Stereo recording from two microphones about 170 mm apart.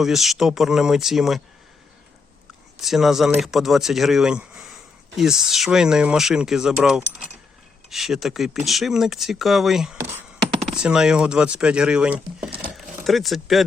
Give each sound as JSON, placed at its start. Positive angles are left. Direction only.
{"t": 0.0, "sound": "speech", "side_deg": 0}
{"t": 2.8, "sound": "speech", "side_deg": 0}
{"t": 10.0, "sound": "speech", "side_deg": -15}
{"t": 10.7, "sound": "speech", "side_deg": -5}